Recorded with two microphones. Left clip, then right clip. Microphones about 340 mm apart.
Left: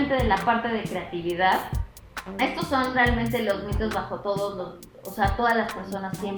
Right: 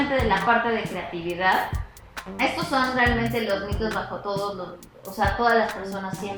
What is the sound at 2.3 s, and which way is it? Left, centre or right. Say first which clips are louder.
Speech: right 1 dB; centre.